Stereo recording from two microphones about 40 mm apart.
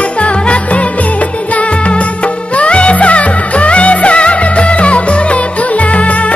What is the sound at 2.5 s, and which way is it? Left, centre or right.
Music, left.